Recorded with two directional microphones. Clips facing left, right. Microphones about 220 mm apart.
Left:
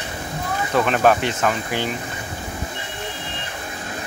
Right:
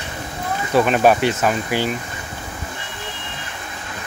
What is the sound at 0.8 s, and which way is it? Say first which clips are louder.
Speech: right 3 dB; 10° right (ahead or behind).